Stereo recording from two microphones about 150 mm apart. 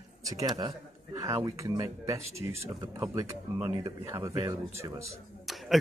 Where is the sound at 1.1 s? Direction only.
20° right (ahead or behind).